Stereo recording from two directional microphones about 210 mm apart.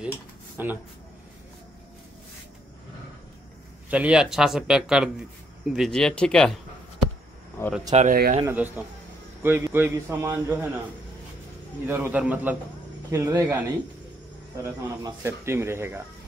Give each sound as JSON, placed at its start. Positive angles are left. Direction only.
{"t": 0.6, "sound": "speech", "side_deg": -10}
{"t": 3.9, "sound": "speech", "side_deg": -5}
{"t": 7.9, "sound": "speech", "side_deg": -35}
{"t": 8.5, "sound": "speech", "side_deg": -10}
{"t": 11.8, "sound": "speech", "side_deg": -10}